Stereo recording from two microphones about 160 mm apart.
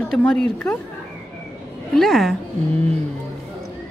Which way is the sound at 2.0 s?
Centre (ahead or behind).